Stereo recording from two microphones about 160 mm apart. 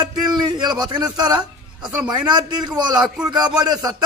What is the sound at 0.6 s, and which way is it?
Speech, 25° right (ahead or behind).